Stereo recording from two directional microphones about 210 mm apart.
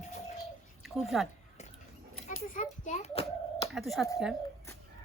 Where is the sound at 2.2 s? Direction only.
40° left (ahead or behind).